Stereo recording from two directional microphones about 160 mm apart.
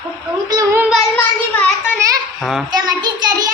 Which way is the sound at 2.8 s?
25° right (ahead or behind).